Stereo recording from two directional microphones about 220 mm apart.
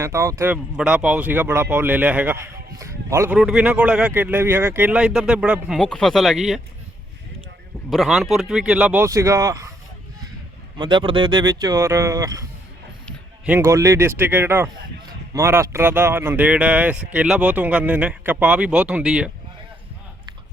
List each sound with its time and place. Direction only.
0.0 s speech: 15° right (ahead or behind)
7.9 s speech: centre (ahead or behind)
10.8 s speech: 20° right (ahead or behind); by 19.3 s 5° right (ahead or behind)